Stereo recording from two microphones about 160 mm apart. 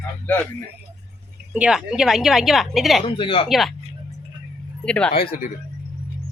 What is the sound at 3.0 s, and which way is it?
Speech, 35° left (ahead or behind).